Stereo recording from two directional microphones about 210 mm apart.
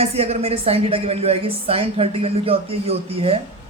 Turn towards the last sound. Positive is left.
turn(degrees=-30)  # may be behind; listen again after turning